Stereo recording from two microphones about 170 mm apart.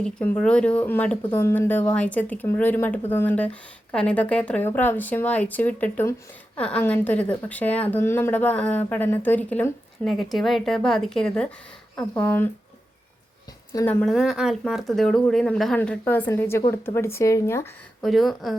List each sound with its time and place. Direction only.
0.0 s speech: 5° left (ahead or behind)
13.7 s speech: 10° left (ahead or behind)
14.1 s speech: centre (ahead or behind); by 17.7 s 15° left (ahead or behind)
18.0 s speech: centre (ahead or behind)